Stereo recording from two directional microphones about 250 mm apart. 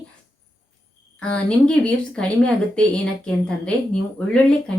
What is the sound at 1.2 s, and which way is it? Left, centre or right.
A woman's voice, centre.